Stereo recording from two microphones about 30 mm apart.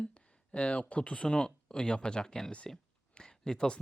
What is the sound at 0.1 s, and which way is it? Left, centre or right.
Speech, left.